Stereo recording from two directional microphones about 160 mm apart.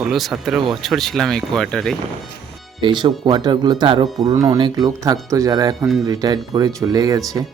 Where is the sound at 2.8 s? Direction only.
30° right (ahead or behind).